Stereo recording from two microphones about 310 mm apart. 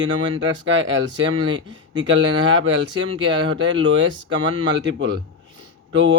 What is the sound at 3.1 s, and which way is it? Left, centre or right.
Speech, centre.